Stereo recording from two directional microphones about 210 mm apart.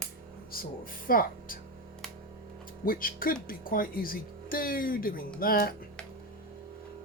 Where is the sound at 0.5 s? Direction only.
45° left (ahead or behind).